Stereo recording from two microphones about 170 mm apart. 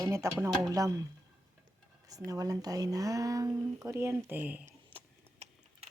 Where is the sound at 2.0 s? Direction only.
20° right (ahead or behind).